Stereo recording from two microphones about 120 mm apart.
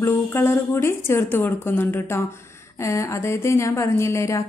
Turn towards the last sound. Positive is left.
turn(degrees=25)  # may be behind; listen again after turning